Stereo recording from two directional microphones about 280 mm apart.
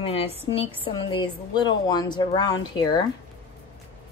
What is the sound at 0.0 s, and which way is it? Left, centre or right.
A woman's voice, left.